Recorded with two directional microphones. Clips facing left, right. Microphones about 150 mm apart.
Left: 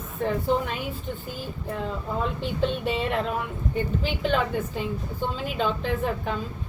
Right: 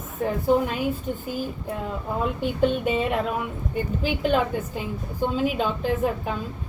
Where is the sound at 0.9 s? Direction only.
45° right (ahead or behind).